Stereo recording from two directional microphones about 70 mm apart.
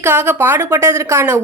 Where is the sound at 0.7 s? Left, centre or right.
Right.